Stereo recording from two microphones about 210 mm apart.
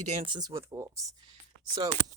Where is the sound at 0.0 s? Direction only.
35° right (ahead or behind).